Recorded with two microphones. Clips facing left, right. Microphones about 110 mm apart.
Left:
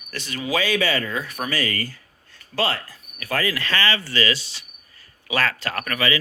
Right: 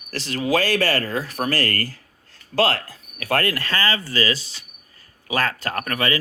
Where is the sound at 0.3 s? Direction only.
60° right (ahead or behind).